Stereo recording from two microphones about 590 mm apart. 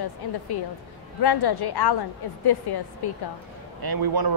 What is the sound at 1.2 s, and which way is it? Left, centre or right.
A woman's voice, left.